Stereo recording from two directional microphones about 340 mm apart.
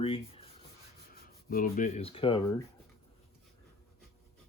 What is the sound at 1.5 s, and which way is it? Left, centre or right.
Speech, left.